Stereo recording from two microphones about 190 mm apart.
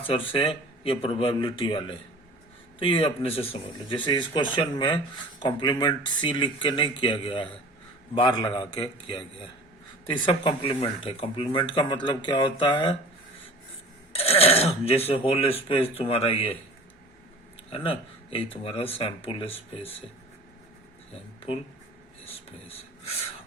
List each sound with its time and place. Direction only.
0.1 s speech: 30° left (ahead or behind)
14.1 s speech: 30° left (ahead or behind)
17.7 s speech: 30° left (ahead or behind)
21.1 s speech: 30° left (ahead or behind)